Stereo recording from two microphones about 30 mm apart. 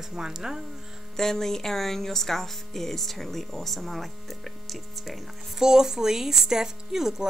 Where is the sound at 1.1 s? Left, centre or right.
Centre.